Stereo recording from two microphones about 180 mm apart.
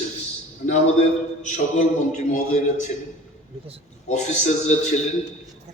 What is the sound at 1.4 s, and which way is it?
A man's voice, 40° left (ahead or behind).